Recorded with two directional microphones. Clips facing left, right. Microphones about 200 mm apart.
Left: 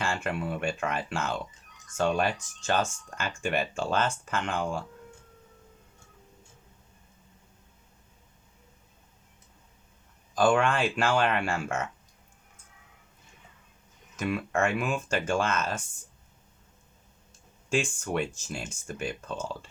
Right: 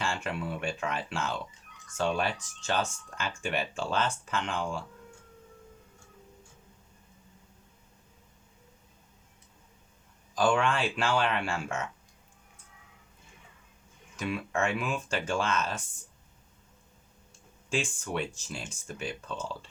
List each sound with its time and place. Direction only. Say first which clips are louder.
0.0 s speech: left 2 dB; 50° left (ahead or behind)
10.3 s speech: left 3 dB; 50° left (ahead or behind)
14.2 s speech: left 3 dB; 45° left (ahead or behind)
17.7 s speech: left 4 dB; 45° left (ahead or behind)